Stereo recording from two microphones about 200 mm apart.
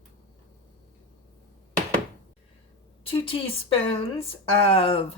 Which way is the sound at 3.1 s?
25° left (ahead or behind).